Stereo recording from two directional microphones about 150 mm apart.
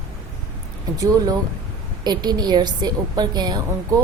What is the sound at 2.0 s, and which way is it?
Speech, 30° right (ahead or behind).